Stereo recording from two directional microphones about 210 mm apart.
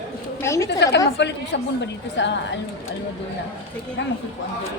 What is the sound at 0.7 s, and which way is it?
A woman's voice, 55° left (ahead or behind).